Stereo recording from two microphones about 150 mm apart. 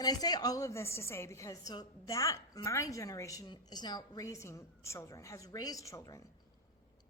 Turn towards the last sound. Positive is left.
turn(degrees=20)  # may be behind; listen again after turning